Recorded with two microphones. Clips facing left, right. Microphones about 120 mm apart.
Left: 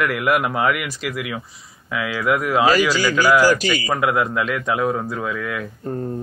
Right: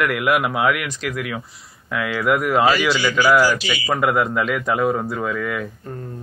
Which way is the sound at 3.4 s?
45° left (ahead or behind).